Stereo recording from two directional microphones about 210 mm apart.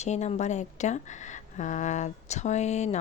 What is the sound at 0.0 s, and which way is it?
Speech, 30° left (ahead or behind).